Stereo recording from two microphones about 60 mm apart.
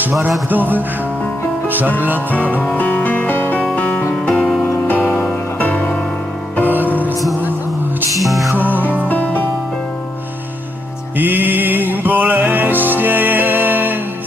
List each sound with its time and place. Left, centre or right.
0.5 s music: right
2.7 s music: left
4.4 s music: centre
5.1 s music: centre
8.2 s music: centre
8.5 s music: right
9.1 s music: left
11.1 s music: right